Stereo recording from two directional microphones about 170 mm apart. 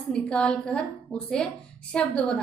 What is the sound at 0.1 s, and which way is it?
A woman's voice, 5° left (ahead or behind).